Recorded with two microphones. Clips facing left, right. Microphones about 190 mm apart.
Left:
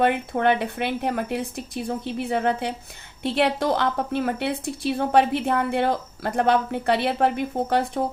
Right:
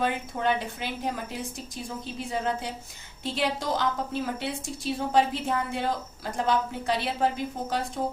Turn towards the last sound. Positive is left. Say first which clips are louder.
# left 7 dB
turn(degrees=60)  # may be behind; listen again after turning